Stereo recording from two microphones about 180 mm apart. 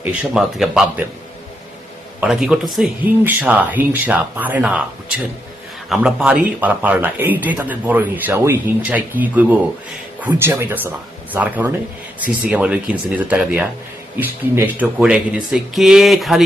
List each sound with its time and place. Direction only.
0.0 s speech: 5° right (ahead or behind)
2.2 s speech: 5° right (ahead or behind)